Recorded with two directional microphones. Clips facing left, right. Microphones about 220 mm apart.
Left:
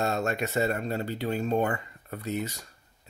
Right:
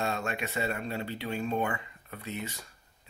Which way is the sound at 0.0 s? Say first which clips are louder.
Left 5 dB; 40° left (ahead or behind).